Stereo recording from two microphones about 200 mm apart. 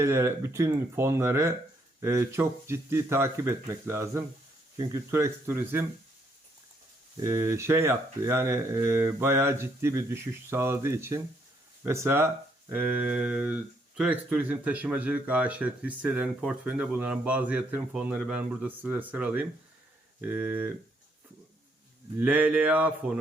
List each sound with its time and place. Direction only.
0.0 s speech: 15° right (ahead or behind)
7.2 s speech: 15° right (ahead or behind)
22.2 s speech: 5° right (ahead or behind)